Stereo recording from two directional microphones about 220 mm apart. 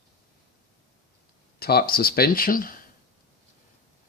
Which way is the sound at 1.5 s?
45° left (ahead or behind).